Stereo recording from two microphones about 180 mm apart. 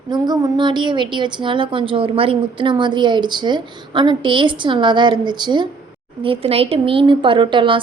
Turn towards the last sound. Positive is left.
turn(degrees=-25)  # may be behind; listen again after turning